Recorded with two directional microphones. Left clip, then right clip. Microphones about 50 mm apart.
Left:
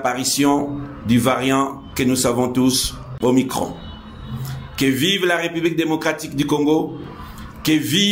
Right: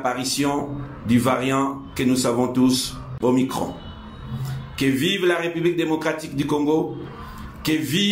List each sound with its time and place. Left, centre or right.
0.0 s speech: left
4.7 s speech: left